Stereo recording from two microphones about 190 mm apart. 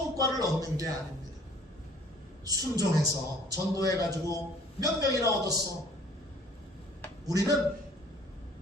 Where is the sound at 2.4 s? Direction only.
20° right (ahead or behind).